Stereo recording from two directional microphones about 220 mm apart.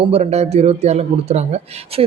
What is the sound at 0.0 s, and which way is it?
Speech, 30° right (ahead or behind).